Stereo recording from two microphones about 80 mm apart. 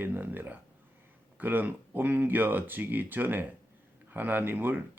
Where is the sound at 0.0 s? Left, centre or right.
Right.